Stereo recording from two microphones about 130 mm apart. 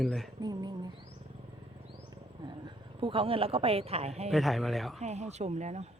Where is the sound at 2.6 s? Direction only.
40° right (ahead or behind).